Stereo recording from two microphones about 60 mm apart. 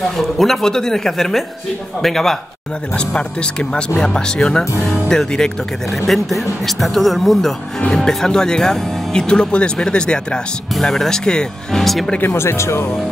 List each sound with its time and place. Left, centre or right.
0.1 s speech: centre
3.0 s speech: centre
12.3 s speech: left